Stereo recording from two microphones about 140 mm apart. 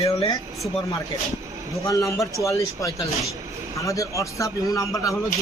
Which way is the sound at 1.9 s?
20° left (ahead or behind).